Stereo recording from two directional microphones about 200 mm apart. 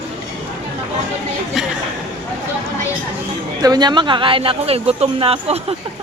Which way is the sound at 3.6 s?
20° right (ahead or behind).